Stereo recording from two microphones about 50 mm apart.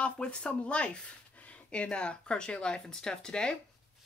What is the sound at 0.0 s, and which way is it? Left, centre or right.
A woman's voice, left.